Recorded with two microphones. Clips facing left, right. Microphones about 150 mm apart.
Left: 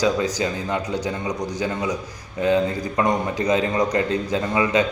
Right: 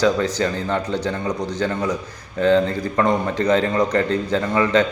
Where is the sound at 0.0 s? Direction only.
15° left (ahead or behind).